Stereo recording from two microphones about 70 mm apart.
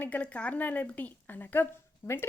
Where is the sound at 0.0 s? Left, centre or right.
Centre.